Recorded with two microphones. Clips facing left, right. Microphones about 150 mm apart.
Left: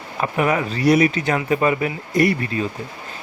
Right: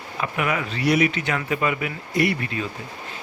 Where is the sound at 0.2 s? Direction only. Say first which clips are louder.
Left 5 dB; 35° left (ahead or behind).